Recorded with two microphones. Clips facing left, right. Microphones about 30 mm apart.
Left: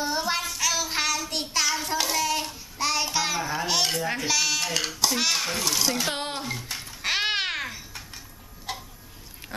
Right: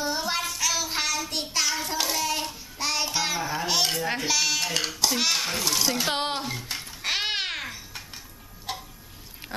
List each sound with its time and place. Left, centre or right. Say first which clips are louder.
0.0 s child singing: left 1 dB; centre
4.2 s a child's voice: even; centre
6.1 s speech: right 3 dB; right
6.4 s babbling: even; centre
8.7 s tick-tock: even; centre